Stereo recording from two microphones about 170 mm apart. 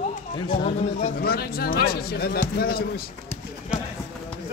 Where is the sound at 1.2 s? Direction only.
65° left (ahead or behind).